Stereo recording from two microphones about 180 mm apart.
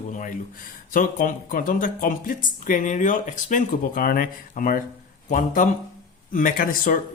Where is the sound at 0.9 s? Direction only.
50° left (ahead or behind).